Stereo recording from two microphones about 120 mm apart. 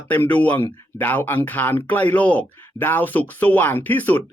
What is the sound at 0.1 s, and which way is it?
Speech, 15° left (ahead or behind).